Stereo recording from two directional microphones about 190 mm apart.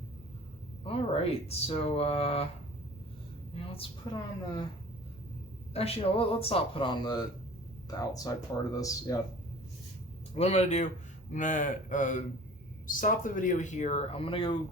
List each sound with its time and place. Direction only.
0.9 s speech: 30° left (ahead or behind)
3.5 s a sound: 30° left (ahead or behind)
4.1 s speech: 20° left (ahead or behind)
5.7 s speech: 30° left (ahead or behind)
10.3 s speech: 35° left (ahead or behind)